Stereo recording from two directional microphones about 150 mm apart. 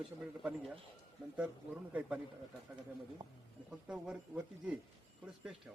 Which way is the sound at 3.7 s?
5° right (ahead or behind).